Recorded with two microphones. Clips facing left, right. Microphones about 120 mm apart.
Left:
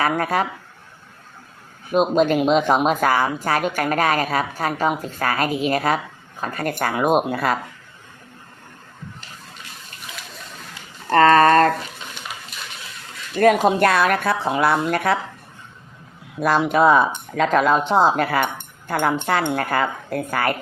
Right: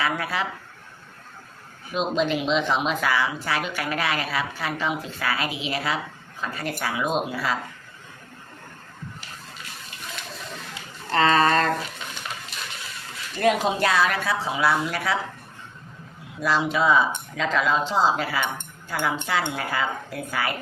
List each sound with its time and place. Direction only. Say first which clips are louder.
0.0 s speech: left 6 dB; 45° left (ahead or behind)
1.9 s speech: left 7 dB; 50° left (ahead or behind)
11.1 s speech: left 7 dB; 50° left (ahead or behind)
13.4 s a woman's voice: left 6 dB; 50° left (ahead or behind)
16.4 s speech: left 6 dB; 55° left (ahead or behind)